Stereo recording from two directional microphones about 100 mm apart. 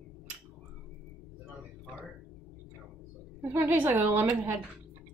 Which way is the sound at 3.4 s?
20° right (ahead or behind).